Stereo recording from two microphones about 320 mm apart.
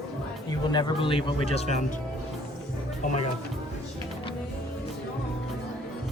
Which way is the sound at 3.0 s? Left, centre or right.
Left.